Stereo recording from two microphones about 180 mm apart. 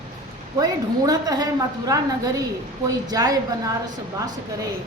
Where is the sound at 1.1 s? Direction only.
20° right (ahead or behind).